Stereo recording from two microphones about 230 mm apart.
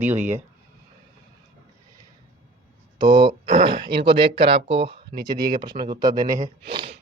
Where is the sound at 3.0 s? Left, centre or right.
Right.